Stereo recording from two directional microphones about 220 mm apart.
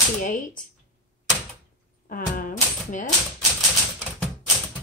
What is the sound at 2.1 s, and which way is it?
Typewriter, 40° left (ahead or behind).